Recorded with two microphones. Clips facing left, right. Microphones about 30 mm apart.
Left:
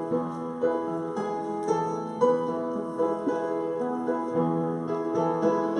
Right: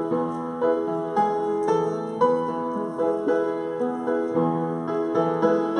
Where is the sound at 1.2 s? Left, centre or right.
Right.